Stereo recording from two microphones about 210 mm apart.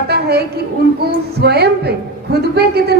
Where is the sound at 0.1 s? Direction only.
50° right (ahead or behind).